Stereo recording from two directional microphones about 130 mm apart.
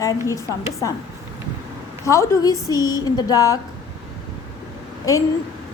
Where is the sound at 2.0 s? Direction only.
25° left (ahead or behind).